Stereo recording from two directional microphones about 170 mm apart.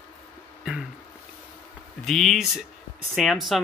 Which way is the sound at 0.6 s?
5° right (ahead or behind).